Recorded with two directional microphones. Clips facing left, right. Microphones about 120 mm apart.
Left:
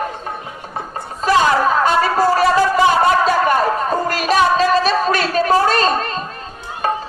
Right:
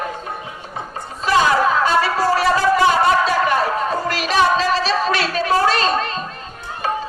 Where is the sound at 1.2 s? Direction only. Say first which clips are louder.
Left 1 dB; 45° left (ahead or behind).